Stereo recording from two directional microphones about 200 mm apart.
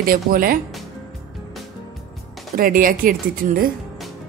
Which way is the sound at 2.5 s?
45° right (ahead or behind).